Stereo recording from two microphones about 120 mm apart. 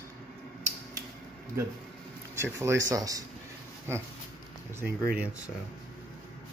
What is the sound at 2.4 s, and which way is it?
Speech, 20° right (ahead or behind).